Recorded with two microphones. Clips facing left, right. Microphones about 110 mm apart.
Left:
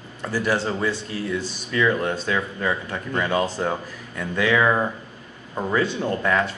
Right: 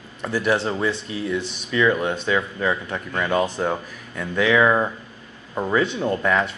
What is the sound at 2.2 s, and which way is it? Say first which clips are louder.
Speech: right 2 dB; centre (ahead or behind).